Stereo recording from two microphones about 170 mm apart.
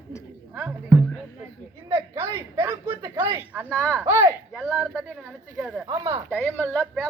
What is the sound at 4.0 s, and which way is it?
Speech, 15° right (ahead or behind).